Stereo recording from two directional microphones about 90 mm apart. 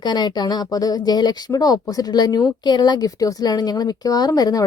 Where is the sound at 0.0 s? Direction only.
55° left (ahead or behind).